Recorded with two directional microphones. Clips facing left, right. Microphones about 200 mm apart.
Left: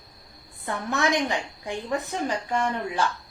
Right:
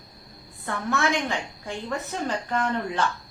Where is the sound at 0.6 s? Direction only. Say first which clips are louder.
Even; 15° left (ahead or behind).